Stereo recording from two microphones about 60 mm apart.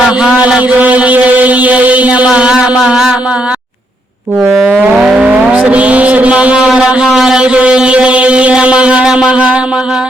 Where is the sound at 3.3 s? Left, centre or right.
Centre.